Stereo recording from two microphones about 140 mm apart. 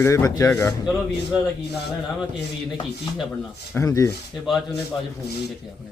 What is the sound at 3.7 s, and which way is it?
Speech, 20° left (ahead or behind).